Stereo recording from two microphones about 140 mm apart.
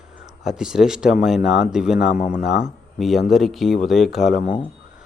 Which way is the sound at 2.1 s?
70° left (ahead or behind).